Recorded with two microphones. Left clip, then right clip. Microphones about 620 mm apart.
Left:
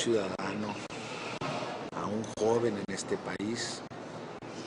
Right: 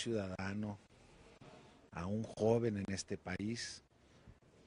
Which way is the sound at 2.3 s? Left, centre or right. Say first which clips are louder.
Left 6 dB; right.